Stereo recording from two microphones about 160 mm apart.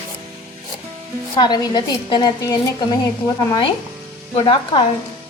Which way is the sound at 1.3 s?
25° left (ahead or behind).